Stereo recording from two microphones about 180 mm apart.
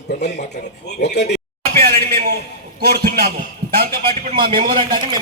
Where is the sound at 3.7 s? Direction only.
55° right (ahead or behind).